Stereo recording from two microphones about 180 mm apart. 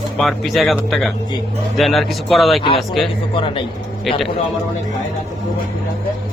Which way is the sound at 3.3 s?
30° left (ahead or behind).